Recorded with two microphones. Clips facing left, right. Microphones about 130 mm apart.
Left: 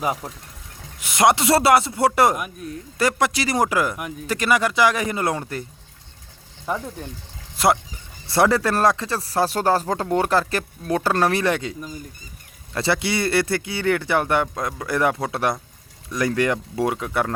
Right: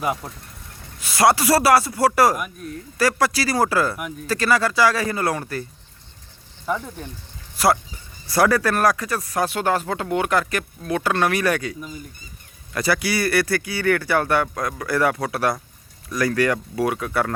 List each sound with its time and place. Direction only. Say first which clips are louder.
0.0 s speech: even; 5° left (ahead or behind)
0.9 s speech: even; 20° left (ahead or behind)
7.5 s speech: even; 20° left (ahead or behind)
12.7 s speech: even; 25° left (ahead or behind)